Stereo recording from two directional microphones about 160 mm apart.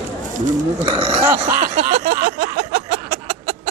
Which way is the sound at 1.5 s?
60° right (ahead or behind).